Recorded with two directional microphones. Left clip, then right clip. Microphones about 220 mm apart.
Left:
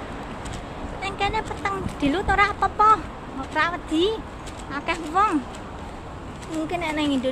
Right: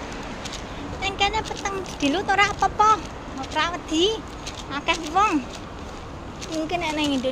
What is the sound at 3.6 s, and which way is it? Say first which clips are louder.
Speech: even; 10° left (ahead or behind).